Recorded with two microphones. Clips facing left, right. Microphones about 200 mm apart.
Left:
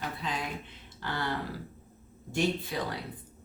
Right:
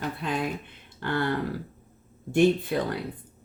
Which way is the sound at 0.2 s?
55° right (ahead or behind).